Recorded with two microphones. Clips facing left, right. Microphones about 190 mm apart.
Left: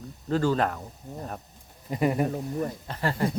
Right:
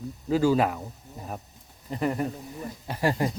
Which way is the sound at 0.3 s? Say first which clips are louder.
Right 2 dB; 10° right (ahead or behind).